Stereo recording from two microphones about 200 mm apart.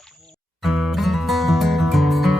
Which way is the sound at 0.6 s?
Centre (ahead or behind).